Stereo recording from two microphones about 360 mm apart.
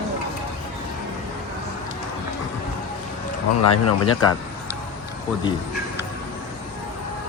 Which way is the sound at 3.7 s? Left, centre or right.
Left.